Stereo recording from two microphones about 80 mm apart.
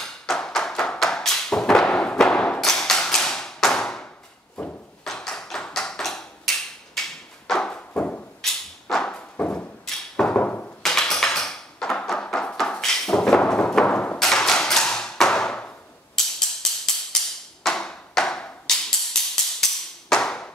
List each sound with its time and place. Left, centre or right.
0.0 s tap: centre
8.4 s thump: centre
9.4 s a sound: centre
10.8 s tap: centre
12.1 s music: centre
17.6 s a sound: centre